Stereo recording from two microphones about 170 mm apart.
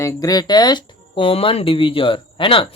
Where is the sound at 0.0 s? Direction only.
20° left (ahead or behind).